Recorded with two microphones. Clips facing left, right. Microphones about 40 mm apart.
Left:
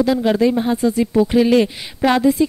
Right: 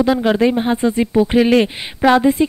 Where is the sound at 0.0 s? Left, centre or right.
Right.